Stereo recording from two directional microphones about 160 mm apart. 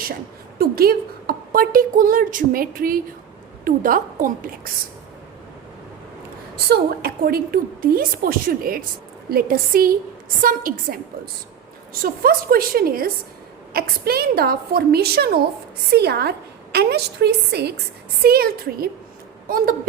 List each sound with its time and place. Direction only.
0.6 s a woman's voice: 70° right (ahead or behind)
6.7 s a woman's voice: 75° right (ahead or behind)
12.0 s a woman's voice: 65° right (ahead or behind)
15.9 s a woman's voice: 90° right
18.2 s a woman's voice: 70° right (ahead or behind)